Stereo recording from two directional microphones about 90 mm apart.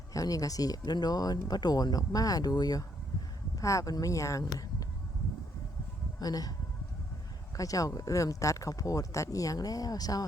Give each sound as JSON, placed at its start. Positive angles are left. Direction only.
{"t": 0.1, "sound": "speech", "side_deg": 40}
{"t": 6.1, "sound": "speech", "side_deg": 45}
{"t": 7.5, "sound": "speech", "side_deg": 40}